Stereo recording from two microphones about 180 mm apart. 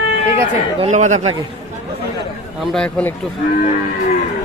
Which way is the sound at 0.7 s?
40° right (ahead or behind).